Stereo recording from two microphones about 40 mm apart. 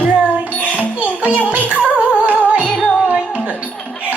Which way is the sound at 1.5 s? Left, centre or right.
Right.